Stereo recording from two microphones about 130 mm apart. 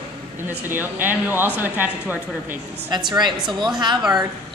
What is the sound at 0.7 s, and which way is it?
A woman's voice, 15° right (ahead or behind).